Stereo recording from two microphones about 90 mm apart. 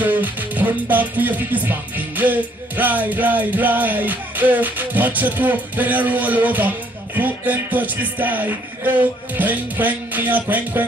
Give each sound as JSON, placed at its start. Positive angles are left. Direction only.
{"t": 0.0, "sound": "music", "side_deg": -20}